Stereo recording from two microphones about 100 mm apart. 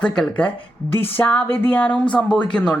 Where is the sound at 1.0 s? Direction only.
15° left (ahead or behind).